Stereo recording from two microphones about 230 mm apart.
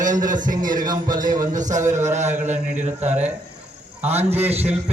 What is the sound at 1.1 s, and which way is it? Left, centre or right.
Speech, centre.